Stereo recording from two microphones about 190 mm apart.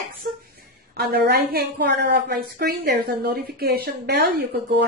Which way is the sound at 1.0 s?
60° right (ahead or behind).